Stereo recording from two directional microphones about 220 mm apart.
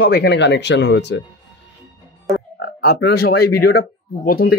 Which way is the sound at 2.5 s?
50° left (ahead or behind).